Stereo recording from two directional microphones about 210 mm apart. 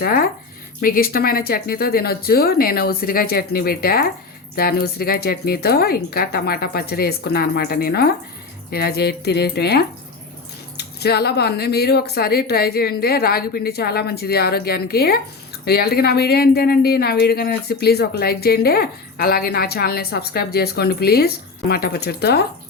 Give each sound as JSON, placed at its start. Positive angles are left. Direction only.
{"t": 0.0, "sound": "speech", "side_deg": 45}